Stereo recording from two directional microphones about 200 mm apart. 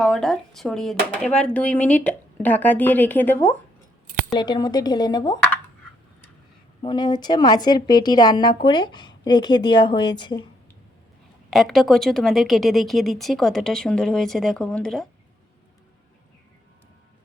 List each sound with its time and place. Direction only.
0.0 s speech: centre (ahead or behind)
4.3 s a woman's voice: 20° left (ahead or behind)
6.8 s a woman's voice: 20° left (ahead or behind)
11.5 s speech: centre (ahead or behind)